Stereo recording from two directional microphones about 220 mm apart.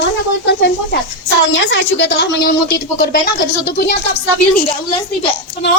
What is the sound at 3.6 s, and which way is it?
Speech, 50° left (ahead or behind).